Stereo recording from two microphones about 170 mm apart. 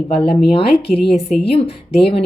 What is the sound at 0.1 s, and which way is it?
Speech, 35° left (ahead or behind).